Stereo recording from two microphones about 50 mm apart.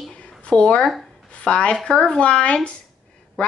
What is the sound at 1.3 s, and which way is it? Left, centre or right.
Speech, left.